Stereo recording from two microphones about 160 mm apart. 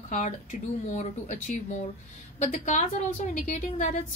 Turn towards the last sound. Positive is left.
turn(degrees=50)  # may be behind; listen again after turning